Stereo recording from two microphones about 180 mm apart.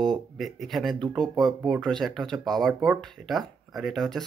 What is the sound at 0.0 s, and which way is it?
Speech, centre (ahead or behind).